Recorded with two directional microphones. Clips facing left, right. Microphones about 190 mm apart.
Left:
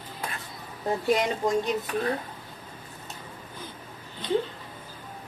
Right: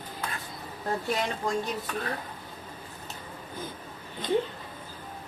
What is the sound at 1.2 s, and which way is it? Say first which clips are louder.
Speech: left 4 dB; 20° left (ahead or behind).